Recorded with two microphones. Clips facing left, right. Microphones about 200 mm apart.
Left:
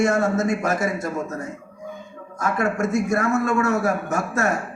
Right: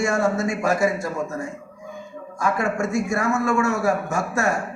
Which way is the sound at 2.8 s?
20° left (ahead or behind).